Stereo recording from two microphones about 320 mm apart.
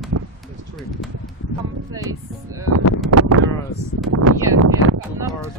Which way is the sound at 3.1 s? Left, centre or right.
Right.